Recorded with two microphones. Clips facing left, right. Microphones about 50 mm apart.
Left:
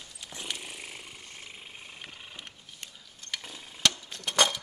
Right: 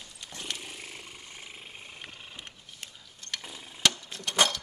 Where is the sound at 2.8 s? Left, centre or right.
Centre.